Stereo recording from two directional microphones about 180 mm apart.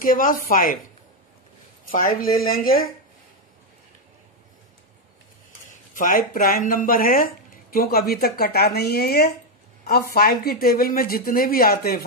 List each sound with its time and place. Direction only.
0.0 s speech: 50° left (ahead or behind)
1.9 s speech: 50° left (ahead or behind)
5.7 s speech: 50° left (ahead or behind)